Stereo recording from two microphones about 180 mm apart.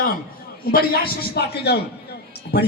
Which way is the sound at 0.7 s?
60° left (ahead or behind).